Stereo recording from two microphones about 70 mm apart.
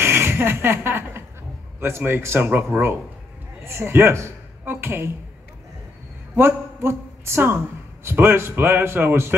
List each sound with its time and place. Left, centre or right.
0.0 s a man's voice: right
6.3 s a woman's voice: right